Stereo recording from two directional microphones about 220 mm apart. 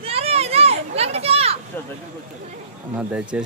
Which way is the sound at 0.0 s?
25° right (ahead or behind).